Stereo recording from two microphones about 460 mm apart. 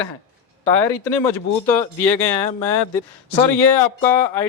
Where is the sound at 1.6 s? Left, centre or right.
Centre.